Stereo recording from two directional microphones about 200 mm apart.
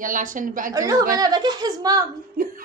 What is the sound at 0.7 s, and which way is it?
A woman's voice, 15° right (ahead or behind).